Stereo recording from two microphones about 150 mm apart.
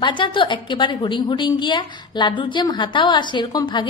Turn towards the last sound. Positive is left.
turn(degrees=30)  # may be behind; listen again after turning